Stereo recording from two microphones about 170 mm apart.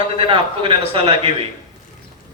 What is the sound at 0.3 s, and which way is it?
A man's voice, 30° right (ahead or behind).